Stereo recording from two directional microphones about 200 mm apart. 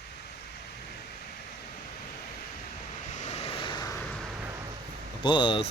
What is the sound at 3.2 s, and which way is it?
Vehicle, 30° left (ahead or behind).